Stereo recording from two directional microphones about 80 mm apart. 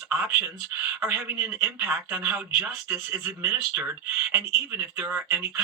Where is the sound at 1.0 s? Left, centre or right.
Right.